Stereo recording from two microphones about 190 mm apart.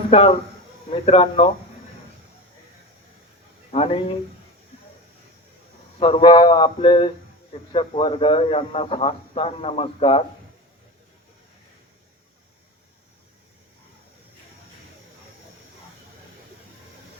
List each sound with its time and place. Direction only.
0.1 s a man's voice: 30° left (ahead or behind)
3.7 s speech: 30° left (ahead or behind)
6.0 s a man's voice: 25° left (ahead or behind)